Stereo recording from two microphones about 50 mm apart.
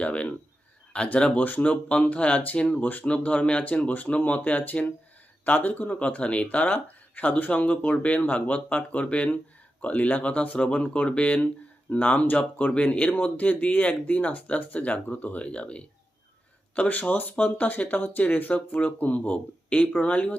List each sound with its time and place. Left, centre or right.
0.0 s speech: left
1.7 s speech: left
2.8 s speech: left
17.0 s speech: left